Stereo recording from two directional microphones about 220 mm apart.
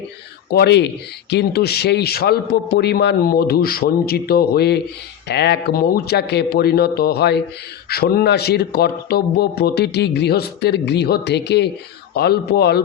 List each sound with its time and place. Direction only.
0.5 s speech: 50° left (ahead or behind)